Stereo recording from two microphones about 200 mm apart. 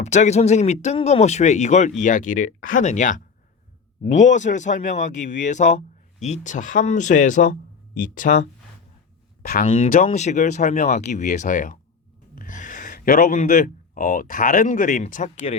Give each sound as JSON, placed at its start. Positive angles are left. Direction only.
{"t": 0.0, "sound": "speech", "side_deg": 35}
{"t": 9.4, "sound": "speech", "side_deg": 45}